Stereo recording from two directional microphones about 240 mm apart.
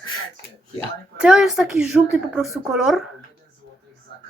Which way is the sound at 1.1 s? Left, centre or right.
Centre.